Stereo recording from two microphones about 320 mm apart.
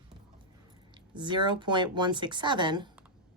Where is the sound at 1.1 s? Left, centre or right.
Centre.